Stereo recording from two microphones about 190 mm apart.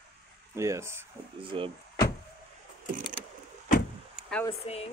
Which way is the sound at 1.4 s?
30° right (ahead or behind).